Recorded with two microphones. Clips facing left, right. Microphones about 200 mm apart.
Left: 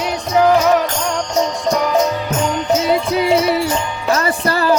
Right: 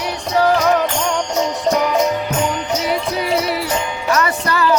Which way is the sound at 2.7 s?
25° left (ahead or behind).